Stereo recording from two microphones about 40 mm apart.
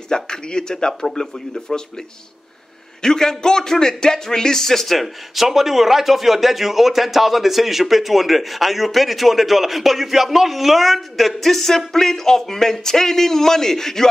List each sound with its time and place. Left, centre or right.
0.1 s a man's voice: centre
3.0 s a man's voice: centre